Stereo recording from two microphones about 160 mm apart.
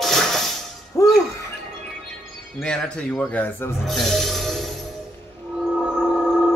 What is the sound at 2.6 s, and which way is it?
Speech, 5° left (ahead or behind).